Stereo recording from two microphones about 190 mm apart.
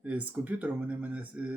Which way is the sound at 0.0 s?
10° right (ahead or behind).